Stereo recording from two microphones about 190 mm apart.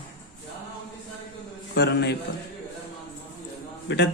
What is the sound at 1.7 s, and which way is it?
Speech, 60° left (ahead or behind).